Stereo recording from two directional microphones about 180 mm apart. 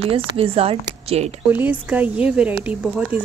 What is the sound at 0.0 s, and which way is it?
A woman's voice, 30° right (ahead or behind).